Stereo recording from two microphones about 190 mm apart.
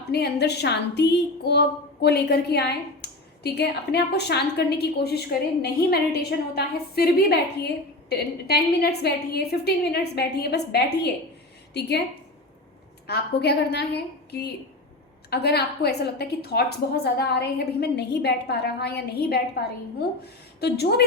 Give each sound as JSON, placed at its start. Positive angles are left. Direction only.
{"t": 0.1, "sound": "a woman's voice", "side_deg": 60}
{"t": 6.6, "sound": "a woman's voice", "side_deg": 55}
{"t": 13.1, "sound": "a woman's voice", "side_deg": 60}